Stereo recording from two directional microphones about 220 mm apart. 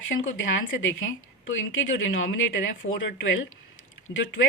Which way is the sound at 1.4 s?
60° left (ahead or behind).